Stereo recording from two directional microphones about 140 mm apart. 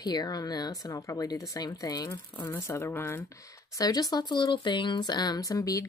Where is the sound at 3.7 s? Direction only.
25° left (ahead or behind).